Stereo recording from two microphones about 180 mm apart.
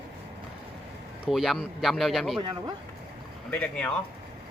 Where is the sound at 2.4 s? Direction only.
25° right (ahead or behind).